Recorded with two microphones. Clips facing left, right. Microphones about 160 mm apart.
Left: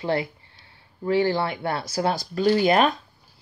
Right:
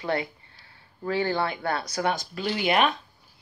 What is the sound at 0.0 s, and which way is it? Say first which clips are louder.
Speech: left 3 dB; 30° left (ahead or behind).